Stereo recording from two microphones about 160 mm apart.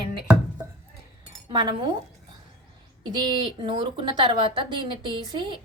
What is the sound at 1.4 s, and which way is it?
Speech, 30° right (ahead or behind).